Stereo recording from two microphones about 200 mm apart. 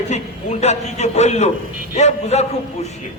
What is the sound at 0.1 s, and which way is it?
A man's voice, 35° left (ahead or behind).